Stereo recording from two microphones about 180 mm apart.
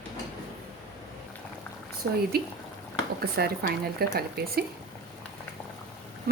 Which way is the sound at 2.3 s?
60° right (ahead or behind).